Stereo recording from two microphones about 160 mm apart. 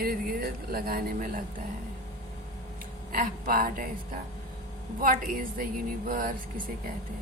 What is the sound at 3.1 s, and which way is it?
Speech, 60° right (ahead or behind).